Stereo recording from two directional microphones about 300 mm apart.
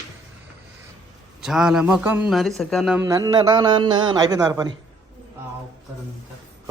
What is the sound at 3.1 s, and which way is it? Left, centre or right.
A man's voice, centre.